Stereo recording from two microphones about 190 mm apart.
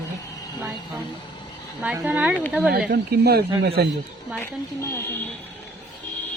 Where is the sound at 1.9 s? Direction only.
10° right (ahead or behind).